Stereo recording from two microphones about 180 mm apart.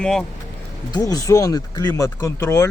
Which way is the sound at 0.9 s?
20° left (ahead or behind).